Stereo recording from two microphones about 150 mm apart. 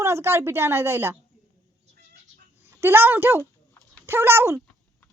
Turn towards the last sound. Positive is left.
turn(degrees=-15)  # may be behind; listen again after turning